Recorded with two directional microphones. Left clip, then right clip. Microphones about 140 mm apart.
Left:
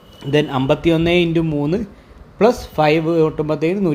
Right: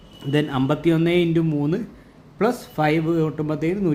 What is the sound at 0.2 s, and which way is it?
A man's voice, 10° left (ahead or behind).